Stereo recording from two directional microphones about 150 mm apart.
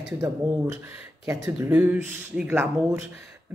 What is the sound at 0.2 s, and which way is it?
Speech, 15° right (ahead or behind).